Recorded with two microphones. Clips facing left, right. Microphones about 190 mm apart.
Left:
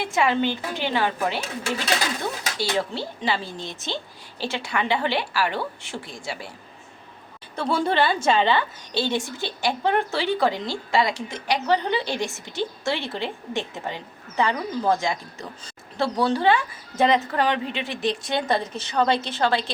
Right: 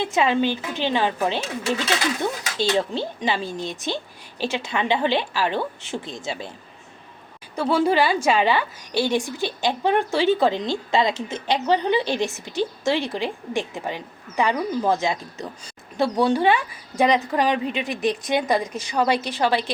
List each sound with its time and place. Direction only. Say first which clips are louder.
0.0 s a woman's voice: right 2 dB; 20° right (ahead or behind)
2.6 s a woman's voice: right 4 dB; 20° right (ahead or behind)
7.5 s speech: right 3 dB; 5° right (ahead or behind)